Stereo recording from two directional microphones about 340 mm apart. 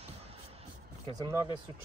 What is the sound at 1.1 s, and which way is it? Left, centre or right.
Speech, centre.